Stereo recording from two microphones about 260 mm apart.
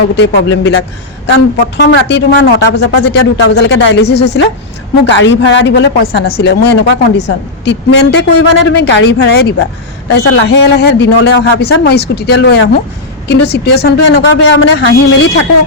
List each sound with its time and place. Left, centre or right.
0.2 s a woman's voice: left